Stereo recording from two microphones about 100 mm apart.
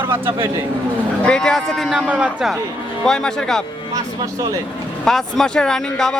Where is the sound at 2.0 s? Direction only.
10° right (ahead or behind).